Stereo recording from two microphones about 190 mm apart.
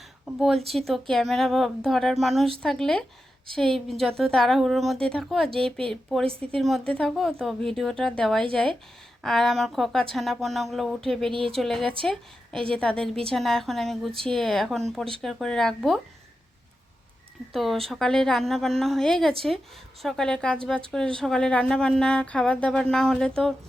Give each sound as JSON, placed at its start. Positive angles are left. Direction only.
{"t": 0.3, "sound": "a woman's voice", "side_deg": 0}
{"t": 11.3, "sound": "speech", "side_deg": -30}
{"t": 11.5, "sound": "a woman's voice", "side_deg": 0}
{"t": 17.5, "sound": "a woman's voice", "side_deg": 0}